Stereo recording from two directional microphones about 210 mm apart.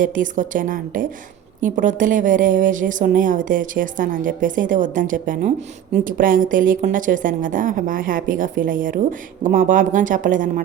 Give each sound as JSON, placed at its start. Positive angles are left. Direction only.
{"t": 0.0, "sound": "a woman's voice", "side_deg": -40}